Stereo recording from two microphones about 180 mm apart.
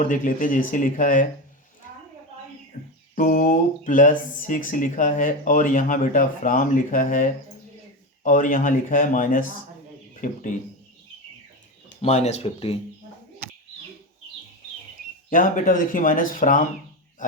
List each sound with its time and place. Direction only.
0.0 s speech: 50° left (ahead or behind)
2.7 s music: 40° left (ahead or behind)
3.2 s speech: 50° left (ahead or behind)
12.0 s speech: 40° left (ahead or behind)
15.3 s speech: 50° left (ahead or behind)